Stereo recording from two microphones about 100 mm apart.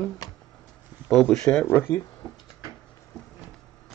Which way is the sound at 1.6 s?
25° left (ahead or behind).